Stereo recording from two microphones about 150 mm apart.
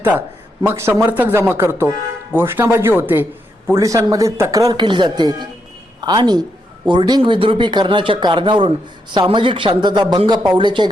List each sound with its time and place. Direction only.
0.6 s speech: 15° right (ahead or behind); by 10.8 s 30° right (ahead or behind)